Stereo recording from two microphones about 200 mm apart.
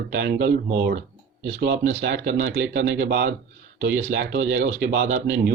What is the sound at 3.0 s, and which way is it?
Speech, 50° right (ahead or behind).